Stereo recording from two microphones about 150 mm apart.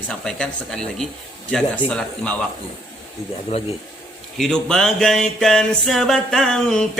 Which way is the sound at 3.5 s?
45° left (ahead or behind).